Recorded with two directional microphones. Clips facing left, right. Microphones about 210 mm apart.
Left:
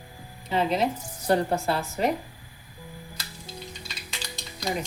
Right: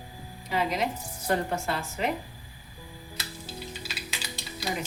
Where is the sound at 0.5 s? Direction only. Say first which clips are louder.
Left 4 dB; 30° left (ahead or behind).